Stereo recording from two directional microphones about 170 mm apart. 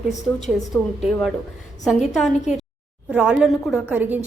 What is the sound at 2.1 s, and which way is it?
A woman's voice, centre (ahead or behind).